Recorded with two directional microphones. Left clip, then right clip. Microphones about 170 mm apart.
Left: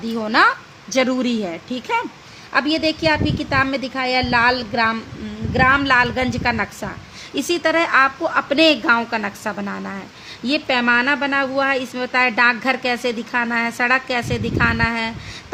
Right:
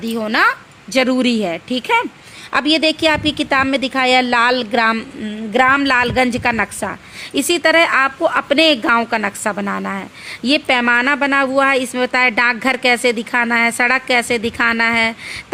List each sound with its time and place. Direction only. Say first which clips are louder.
0.0 s speech: right 1 dB; 10° right (ahead or behind)
0.9 s a woman's voice: right 4 dB; 25° right (ahead or behind)